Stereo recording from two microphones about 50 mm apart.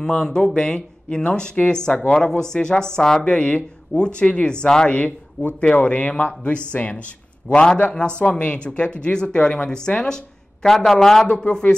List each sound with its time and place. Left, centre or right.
0.2 s speech: centre
11.4 s speech: left